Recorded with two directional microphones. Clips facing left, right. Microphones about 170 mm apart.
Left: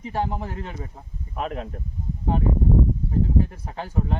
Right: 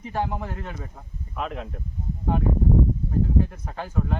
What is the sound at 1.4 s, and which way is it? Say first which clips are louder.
Speech: left 2 dB; 40° left (ahead or behind).